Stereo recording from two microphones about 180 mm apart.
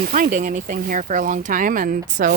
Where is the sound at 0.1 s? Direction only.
45° right (ahead or behind).